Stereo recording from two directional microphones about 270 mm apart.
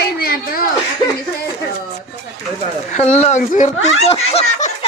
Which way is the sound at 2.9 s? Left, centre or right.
Left.